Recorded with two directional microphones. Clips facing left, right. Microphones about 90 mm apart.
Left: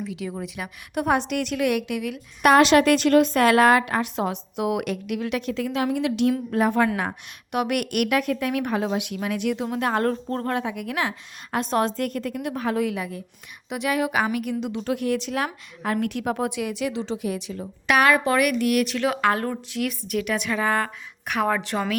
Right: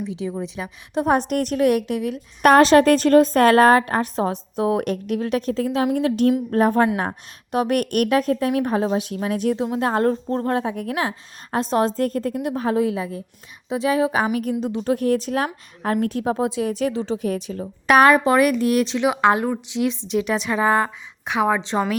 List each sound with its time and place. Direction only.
0.0 s a woman's voice: 25° right (ahead or behind)
16.6 s a woman's voice: 40° right (ahead or behind); by 21.9 s 20° right (ahead or behind)